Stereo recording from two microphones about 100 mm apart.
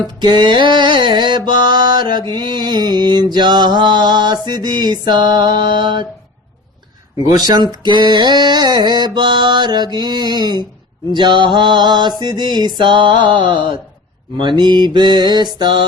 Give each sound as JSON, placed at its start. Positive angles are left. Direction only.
{"t": 0.2, "sound": "mantra", "side_deg": -50}
{"t": 7.3, "sound": "mantra", "side_deg": -45}